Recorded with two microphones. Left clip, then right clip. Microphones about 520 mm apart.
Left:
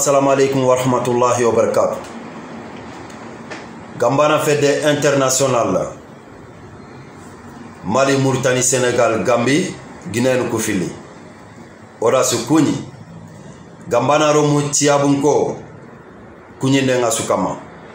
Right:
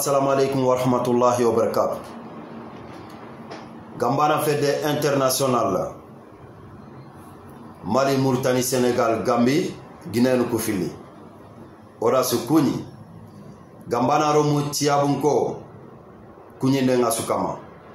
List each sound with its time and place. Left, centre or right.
0.0 s a man's voice: right
4.0 s a man's voice: right
7.9 s a man's voice: right
12.0 s a man's voice: right
13.8 s a man's voice: right
16.5 s a man's voice: right